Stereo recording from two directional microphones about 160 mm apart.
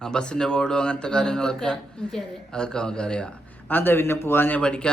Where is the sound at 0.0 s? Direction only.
5° left (ahead or behind).